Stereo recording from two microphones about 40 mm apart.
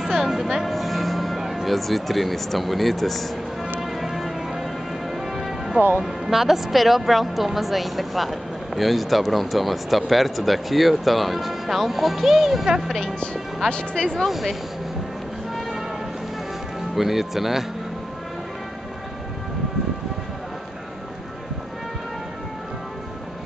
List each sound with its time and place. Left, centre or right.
0.2 s speech: centre
3.8 s a sound: centre
5.1 s music: centre
5.9 s speech: centre
13.7 s speech: left
14.1 s speech: centre
16.9 s speech: centre